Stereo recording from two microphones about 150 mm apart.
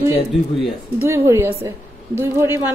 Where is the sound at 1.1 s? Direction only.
20° right (ahead or behind).